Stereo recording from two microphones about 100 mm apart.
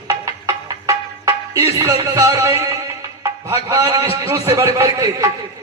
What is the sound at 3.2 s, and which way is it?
A man's voice, 30° right (ahead or behind).